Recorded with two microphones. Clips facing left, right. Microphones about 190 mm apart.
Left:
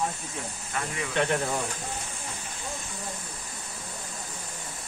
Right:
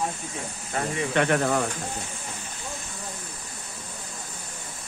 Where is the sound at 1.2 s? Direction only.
65° right (ahead or behind).